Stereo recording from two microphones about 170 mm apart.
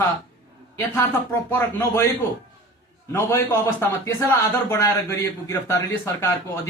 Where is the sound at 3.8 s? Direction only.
15° left (ahead or behind).